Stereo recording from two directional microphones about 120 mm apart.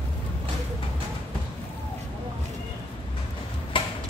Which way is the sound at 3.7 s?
45° left (ahead or behind).